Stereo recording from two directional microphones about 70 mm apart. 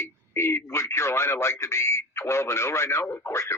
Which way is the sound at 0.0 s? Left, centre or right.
Left.